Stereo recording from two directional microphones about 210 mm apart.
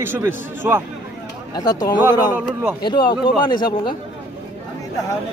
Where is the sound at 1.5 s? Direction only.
20° left (ahead or behind).